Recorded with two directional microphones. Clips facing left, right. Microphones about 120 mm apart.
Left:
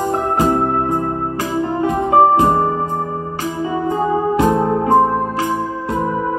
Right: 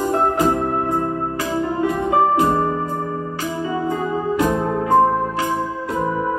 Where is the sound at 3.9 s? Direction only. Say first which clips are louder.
Left 4 dB; 40° left (ahead or behind).